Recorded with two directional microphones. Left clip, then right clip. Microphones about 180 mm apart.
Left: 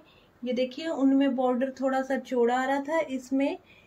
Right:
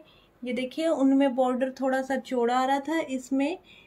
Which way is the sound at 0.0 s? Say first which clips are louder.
Left 1 dB; 50° right (ahead or behind).